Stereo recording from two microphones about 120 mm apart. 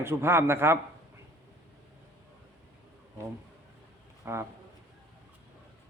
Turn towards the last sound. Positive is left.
turn(degrees=-20)  # may be behind; listen again after turning